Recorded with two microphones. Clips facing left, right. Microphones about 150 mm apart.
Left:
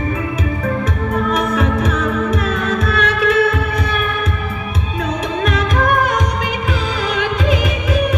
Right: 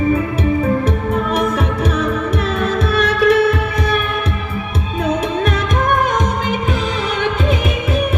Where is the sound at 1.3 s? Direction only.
30° right (ahead or behind).